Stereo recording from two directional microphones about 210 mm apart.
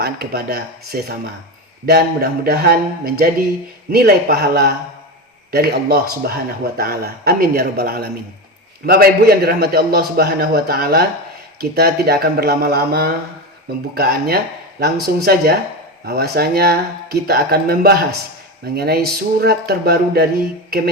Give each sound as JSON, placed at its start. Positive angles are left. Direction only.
{"t": 0.0, "sound": "a man's voice", "side_deg": -45}